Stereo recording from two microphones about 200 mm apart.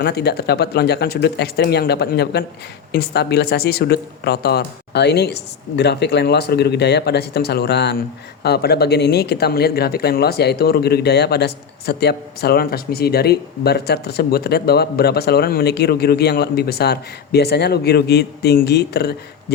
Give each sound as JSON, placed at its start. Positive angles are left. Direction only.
{"t": 0.0, "sound": "speech", "side_deg": 55}